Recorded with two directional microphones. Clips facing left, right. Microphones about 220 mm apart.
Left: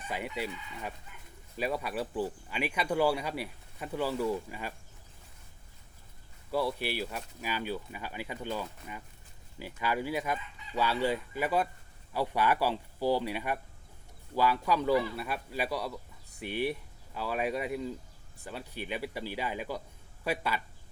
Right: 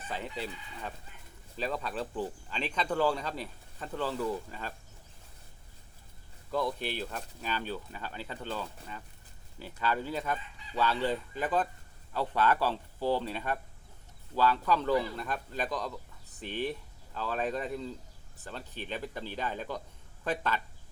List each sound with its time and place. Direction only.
1.1 s a sound: 30° right (ahead or behind)
1.5 s speech: 10° left (ahead or behind)
6.5 s speech: 10° left (ahead or behind)